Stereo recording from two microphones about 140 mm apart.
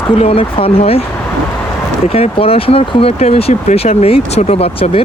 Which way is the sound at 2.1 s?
45° left (ahead or behind).